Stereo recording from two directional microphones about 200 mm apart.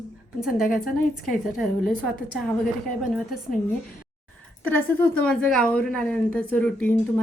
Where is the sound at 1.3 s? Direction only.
Centre (ahead or behind).